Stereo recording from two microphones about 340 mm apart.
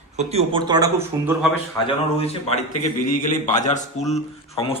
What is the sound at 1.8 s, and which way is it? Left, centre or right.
A man's voice, centre.